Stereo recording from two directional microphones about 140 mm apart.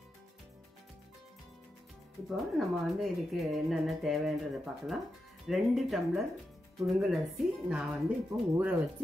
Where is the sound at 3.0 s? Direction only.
Centre (ahead or behind).